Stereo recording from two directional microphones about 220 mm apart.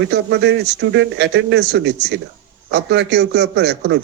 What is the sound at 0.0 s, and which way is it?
Speech, 50° right (ahead or behind).